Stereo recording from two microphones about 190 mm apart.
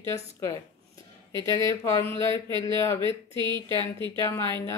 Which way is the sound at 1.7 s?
15° left (ahead or behind).